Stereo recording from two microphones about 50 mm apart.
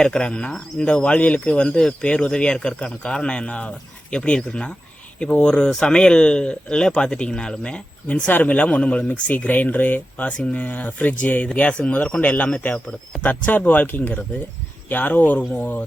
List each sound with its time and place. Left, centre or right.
0.0 s speech: centre; by 15.8 s left